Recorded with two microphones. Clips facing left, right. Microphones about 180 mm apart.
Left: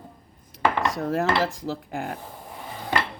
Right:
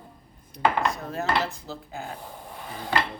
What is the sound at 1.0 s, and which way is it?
Dishes, 90° left.